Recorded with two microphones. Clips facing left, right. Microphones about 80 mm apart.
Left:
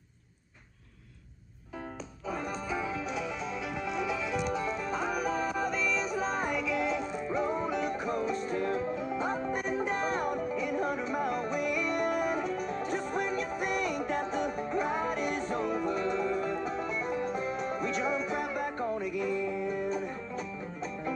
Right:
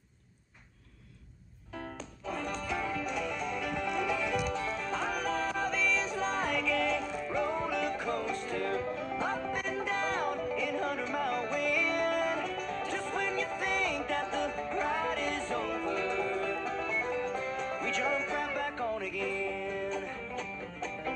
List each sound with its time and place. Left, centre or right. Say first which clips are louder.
2.2 s music: left 1 dB; centre